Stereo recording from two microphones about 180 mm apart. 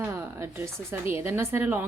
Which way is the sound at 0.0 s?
15° right (ahead or behind).